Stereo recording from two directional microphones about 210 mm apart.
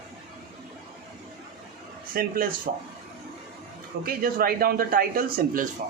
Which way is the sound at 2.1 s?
45° right (ahead or behind).